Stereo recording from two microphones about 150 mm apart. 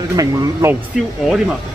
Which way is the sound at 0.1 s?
20° right (ahead or behind).